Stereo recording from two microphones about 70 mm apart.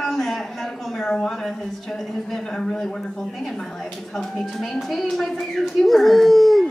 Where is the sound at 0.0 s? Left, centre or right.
Centre.